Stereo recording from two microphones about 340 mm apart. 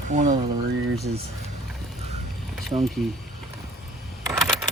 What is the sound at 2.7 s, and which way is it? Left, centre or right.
Speech, centre.